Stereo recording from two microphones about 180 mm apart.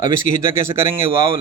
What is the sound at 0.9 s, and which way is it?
Speech, 30° right (ahead or behind).